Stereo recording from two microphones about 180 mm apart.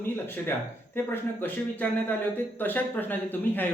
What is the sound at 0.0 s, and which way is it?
Speech, 10° left (ahead or behind).